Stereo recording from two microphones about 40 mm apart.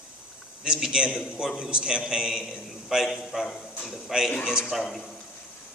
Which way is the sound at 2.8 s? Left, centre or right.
Centre.